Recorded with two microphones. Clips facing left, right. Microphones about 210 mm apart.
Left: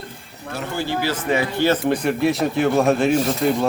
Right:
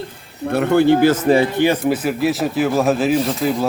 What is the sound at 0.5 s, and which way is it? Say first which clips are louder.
Speech: right 12 dB; 60° right (ahead or behind).